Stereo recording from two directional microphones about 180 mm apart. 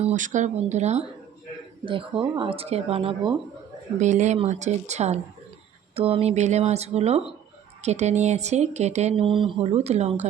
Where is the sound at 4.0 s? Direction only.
40° right (ahead or behind).